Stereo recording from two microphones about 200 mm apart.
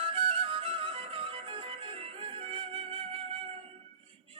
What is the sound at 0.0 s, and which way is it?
Music, 25° right (ahead or behind).